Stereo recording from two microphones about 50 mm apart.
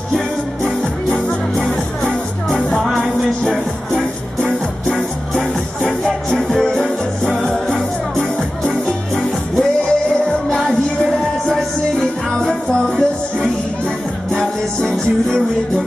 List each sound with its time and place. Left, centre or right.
2.0 s music: centre
12.4 s music: centre